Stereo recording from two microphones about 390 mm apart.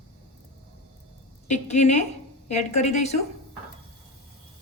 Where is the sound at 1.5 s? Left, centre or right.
Centre.